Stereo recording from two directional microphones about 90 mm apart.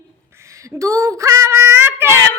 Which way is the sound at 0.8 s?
35° right (ahead or behind).